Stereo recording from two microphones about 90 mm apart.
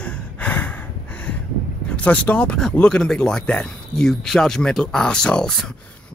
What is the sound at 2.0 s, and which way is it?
Speech, 15° left (ahead or behind).